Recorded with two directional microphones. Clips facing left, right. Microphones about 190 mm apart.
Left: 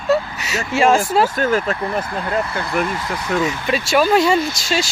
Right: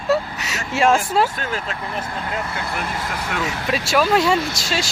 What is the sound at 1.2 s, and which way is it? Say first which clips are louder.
Speech: left 6 dB; 45° left (ahead or behind).